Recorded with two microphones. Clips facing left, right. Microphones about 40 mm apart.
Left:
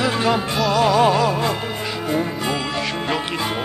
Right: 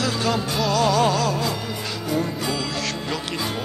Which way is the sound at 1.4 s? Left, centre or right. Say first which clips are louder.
Left 4 dB; left.